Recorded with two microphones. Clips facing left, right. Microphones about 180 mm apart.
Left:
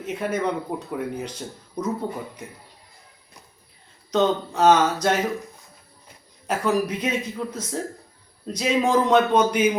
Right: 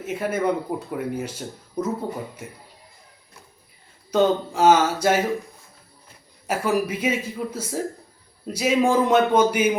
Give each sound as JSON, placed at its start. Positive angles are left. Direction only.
{"t": 0.0, "sound": "speech", "side_deg": -5}
{"t": 4.1, "sound": "speech", "side_deg": -10}
{"t": 6.5, "sound": "speech", "side_deg": -5}